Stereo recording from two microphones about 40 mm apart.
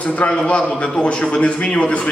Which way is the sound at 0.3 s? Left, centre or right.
Left.